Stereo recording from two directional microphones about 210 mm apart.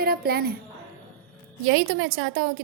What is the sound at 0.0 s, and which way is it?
Speech, 45° right (ahead or behind).